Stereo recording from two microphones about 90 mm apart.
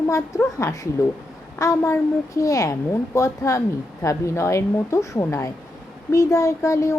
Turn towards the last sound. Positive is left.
turn(degrees=35)  # may be behind; listen again after turning